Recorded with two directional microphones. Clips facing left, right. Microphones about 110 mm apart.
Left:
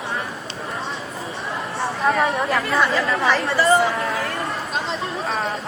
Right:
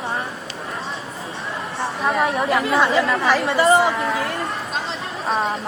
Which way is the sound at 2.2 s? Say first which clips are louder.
Right 1 dB; 5° right (ahead or behind).